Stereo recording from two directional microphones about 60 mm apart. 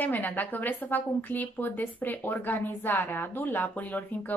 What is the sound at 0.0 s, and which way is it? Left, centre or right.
Speech, left.